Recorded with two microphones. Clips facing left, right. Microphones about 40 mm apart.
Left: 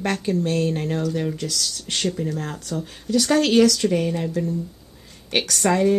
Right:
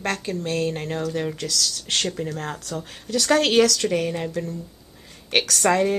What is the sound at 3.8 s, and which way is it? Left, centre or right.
Speech, centre.